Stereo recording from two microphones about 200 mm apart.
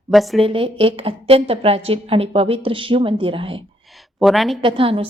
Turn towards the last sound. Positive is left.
turn(degrees=-25)  # may be behind; listen again after turning